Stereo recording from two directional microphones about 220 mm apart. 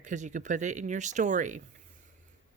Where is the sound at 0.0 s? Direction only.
35° right (ahead or behind).